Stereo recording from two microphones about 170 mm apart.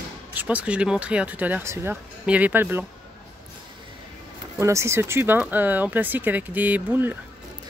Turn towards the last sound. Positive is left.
turn(degrees=-10)  # may be behind; listen again after turning